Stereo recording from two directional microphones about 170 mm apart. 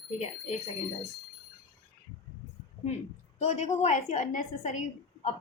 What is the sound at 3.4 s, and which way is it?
A woman's voice, 40° left (ahead or behind).